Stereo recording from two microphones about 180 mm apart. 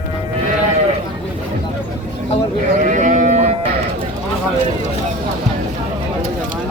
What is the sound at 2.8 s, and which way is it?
Livestock, 45° right (ahead or behind).